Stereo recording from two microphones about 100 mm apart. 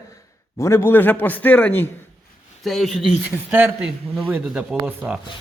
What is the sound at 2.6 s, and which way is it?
Speech, centre (ahead or behind).